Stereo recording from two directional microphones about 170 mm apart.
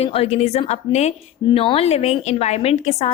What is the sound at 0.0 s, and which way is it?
A woman's voice, 35° left (ahead or behind).